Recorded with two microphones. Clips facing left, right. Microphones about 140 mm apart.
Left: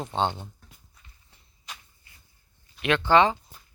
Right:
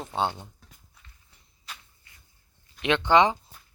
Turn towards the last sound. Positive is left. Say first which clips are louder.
# even
turn(degrees=-20)  # may be behind; listen again after turning